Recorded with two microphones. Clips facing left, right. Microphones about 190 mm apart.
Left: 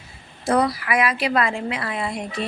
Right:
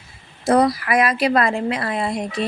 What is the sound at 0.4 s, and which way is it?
Speech, 40° right (ahead or behind).